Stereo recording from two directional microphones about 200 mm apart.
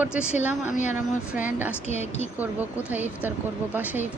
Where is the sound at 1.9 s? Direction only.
35° left (ahead or behind).